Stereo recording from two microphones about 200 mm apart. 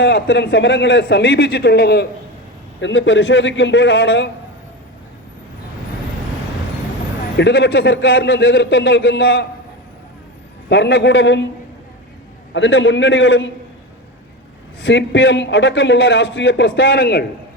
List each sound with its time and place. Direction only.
0.0 s a man's voice: 65° left (ahead or behind)
2.8 s a man's voice: 65° left (ahead or behind)
7.3 s a man's voice: 60° left (ahead or behind)
10.7 s a man's voice: 60° left (ahead or behind)
12.5 s a man's voice: 70° left (ahead or behind)
14.8 s a man's voice: 65° left (ahead or behind); by 17.2 s 50° left (ahead or behind)